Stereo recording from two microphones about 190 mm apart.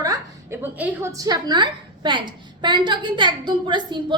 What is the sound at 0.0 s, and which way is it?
A woman's voice, 15° right (ahead or behind).